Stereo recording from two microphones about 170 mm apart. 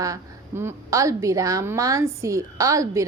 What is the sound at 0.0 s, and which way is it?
A woman's voice, 15° right (ahead or behind).